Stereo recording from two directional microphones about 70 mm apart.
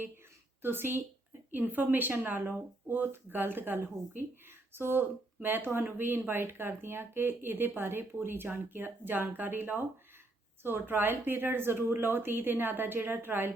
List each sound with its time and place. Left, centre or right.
0.6 s speech: right